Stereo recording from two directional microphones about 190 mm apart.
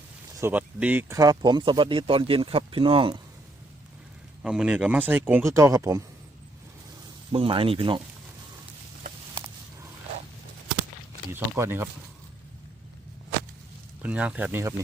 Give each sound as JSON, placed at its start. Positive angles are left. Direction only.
{"t": 0.3, "sound": "speech", "side_deg": -10}
{"t": 4.4, "sound": "speech", "side_deg": -5}
{"t": 7.3, "sound": "speech", "side_deg": -30}
{"t": 11.3, "sound": "speech", "side_deg": -10}
{"t": 14.0, "sound": "speech", "side_deg": -5}